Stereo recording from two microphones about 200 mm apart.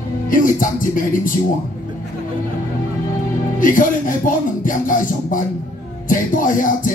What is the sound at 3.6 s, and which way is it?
Music, 40° left (ahead or behind).